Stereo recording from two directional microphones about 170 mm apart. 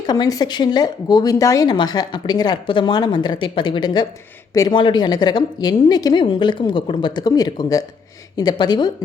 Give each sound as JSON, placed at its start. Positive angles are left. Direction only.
{"t": 0.1, "sound": "speech", "side_deg": 25}